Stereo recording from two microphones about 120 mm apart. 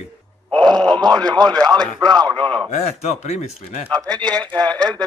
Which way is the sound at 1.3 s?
35° right (ahead or behind).